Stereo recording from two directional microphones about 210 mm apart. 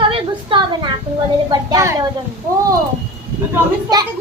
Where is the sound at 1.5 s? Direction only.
15° right (ahead or behind).